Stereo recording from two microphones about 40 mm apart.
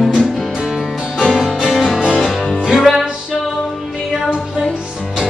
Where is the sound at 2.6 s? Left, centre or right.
Centre.